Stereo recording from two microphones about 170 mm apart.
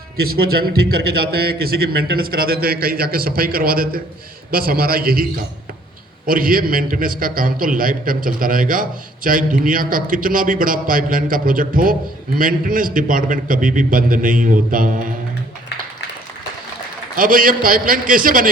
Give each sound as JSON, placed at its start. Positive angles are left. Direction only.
{"t": 0.3, "sound": "a man's voice", "side_deg": -65}
{"t": 6.2, "sound": "a man's voice", "side_deg": -55}
{"t": 17.2, "sound": "a man's voice", "side_deg": -55}